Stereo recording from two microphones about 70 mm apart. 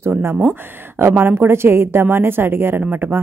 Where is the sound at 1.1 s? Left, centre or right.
Right.